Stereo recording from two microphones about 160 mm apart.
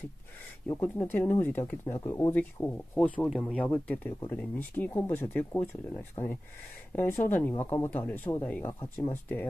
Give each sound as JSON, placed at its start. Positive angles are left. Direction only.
{"t": 0.7, "sound": "speech", "side_deg": 15}
{"t": 6.2, "sound": "speech", "side_deg": 30}
{"t": 7.0, "sound": "speech", "side_deg": 10}